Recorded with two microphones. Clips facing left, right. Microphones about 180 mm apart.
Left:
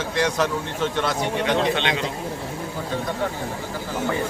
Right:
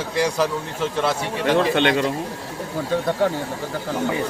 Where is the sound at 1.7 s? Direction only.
50° right (ahead or behind).